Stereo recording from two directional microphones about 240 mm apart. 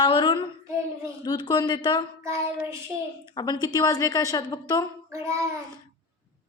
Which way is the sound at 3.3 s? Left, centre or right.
Centre.